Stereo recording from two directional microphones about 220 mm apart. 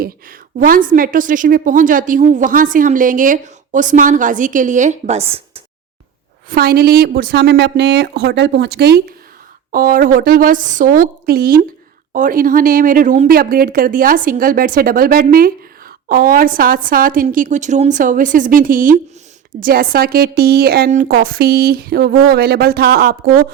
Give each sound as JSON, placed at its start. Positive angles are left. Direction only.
{"t": 0.0, "sound": "speech", "side_deg": -40}
{"t": 6.5, "sound": "speech", "side_deg": -45}